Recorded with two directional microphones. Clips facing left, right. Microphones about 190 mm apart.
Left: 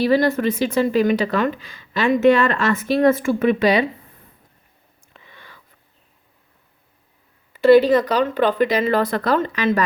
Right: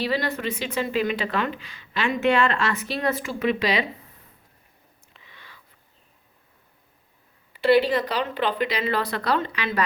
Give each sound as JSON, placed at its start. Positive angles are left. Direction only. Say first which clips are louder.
{"t": 0.0, "sound": "a woman's voice", "louder": "left 9 dB", "side_deg": 45}
{"t": 5.1, "sound": "a sound", "louder": "left 5 dB", "side_deg": 50}
{"t": 7.5, "sound": "a woman's voice", "louder": "left 7 dB", "side_deg": 45}